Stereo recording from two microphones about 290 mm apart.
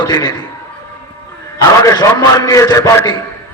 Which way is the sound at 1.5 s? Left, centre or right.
Centre.